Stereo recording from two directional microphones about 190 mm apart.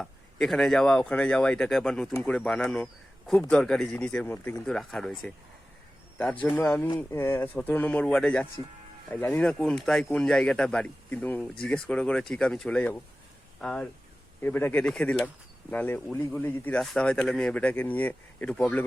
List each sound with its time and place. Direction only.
0.0 s speech: centre (ahead or behind)
6.4 s a man's voice: 10° left (ahead or behind)
6.8 s speech: 25° left (ahead or behind)
7.2 s a man's voice: 10° left (ahead or behind)